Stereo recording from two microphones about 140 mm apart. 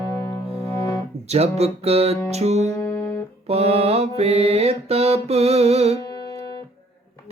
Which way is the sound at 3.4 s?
50° right (ahead or behind).